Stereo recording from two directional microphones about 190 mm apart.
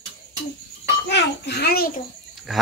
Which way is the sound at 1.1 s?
65° left (ahead or behind).